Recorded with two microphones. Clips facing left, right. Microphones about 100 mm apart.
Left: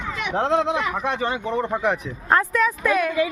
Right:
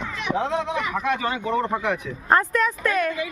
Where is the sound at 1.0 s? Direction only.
25° left (ahead or behind).